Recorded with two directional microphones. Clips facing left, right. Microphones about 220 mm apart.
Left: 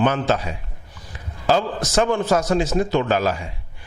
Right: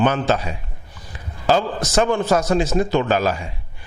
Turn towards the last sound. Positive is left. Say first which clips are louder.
# right 1 dB
turn(degrees=-15)  # may be behind; listen again after turning